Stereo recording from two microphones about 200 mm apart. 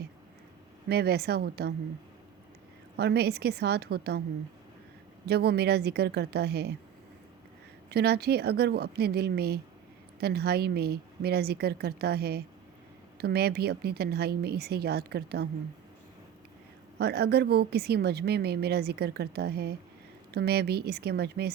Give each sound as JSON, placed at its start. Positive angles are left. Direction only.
{"t": 0.9, "sound": "a woman's voice", "side_deg": -55}
{"t": 3.0, "sound": "a woman's voice", "side_deg": -55}
{"t": 5.2, "sound": "a woman's voice", "side_deg": -55}
{"t": 7.9, "sound": "a woman's voice", "side_deg": -55}
{"t": 17.0, "sound": "a woman's voice", "side_deg": -55}